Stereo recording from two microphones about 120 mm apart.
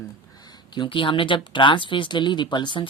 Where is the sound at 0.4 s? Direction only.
40° left (ahead or behind).